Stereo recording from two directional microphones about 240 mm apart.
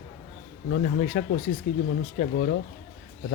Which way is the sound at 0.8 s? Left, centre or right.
Left.